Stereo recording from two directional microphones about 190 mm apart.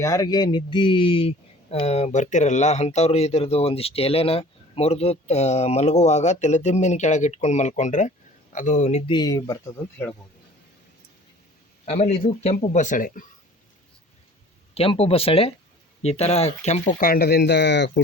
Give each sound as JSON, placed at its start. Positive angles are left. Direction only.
{"t": 0.0, "sound": "speech", "side_deg": 20}
{"t": 11.9, "sound": "speech", "side_deg": 35}
{"t": 14.8, "sound": "speech", "side_deg": 30}